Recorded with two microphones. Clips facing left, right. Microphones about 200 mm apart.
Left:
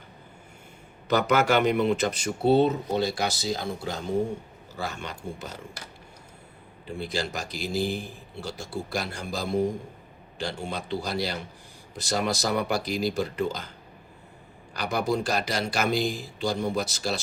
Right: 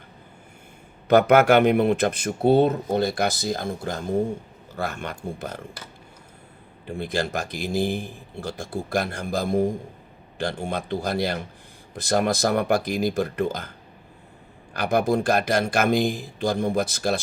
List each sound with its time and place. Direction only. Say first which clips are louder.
1.0 s speech: right 7 dB; 55° right (ahead or behind)
6.8 s speech: right 4 dB; 55° right (ahead or behind)